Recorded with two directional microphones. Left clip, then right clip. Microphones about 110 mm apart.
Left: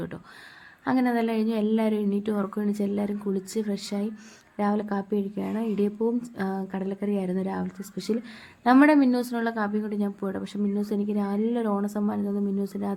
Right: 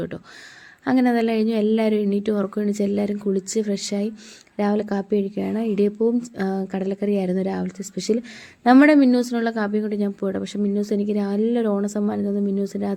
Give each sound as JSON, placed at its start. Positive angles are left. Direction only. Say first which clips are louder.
{"t": 0.9, "sound": "a woman's voice", "louder": "right 5 dB", "side_deg": -20}